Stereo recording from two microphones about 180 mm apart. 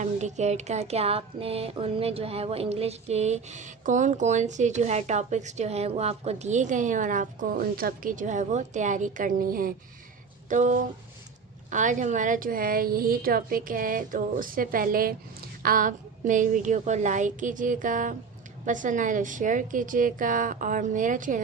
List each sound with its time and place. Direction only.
0.0 s a woman's voice: 40° right (ahead or behind)